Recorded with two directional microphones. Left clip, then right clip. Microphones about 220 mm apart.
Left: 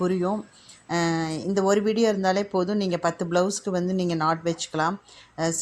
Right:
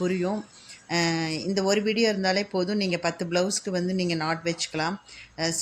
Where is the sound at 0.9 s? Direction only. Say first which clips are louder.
Left 1 dB; 15° left (ahead or behind).